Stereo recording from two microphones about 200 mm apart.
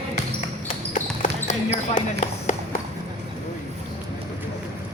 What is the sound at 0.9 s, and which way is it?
Basketball bounce, 35° left (ahead or behind).